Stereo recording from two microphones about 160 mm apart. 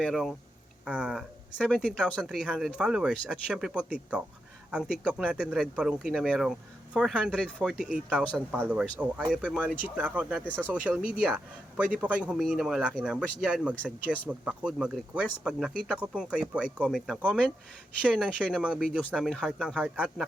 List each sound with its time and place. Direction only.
0.0 s speech: centre (ahead or behind)
1.5 s speech: 5° left (ahead or behind)
10.4 s speech: 10° left (ahead or behind)
10.7 s speech: 10° right (ahead or behind)